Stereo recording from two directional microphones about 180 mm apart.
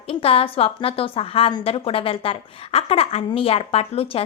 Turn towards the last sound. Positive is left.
turn(degrees=30)  # may be behind; listen again after turning